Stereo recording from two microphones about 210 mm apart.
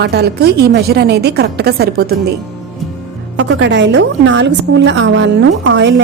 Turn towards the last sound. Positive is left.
turn(degrees=-55)  # may be behind; listen again after turning